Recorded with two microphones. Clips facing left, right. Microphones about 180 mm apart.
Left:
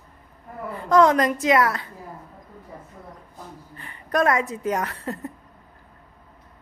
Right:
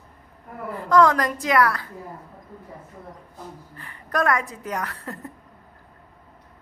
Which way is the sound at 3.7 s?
20° left (ahead or behind).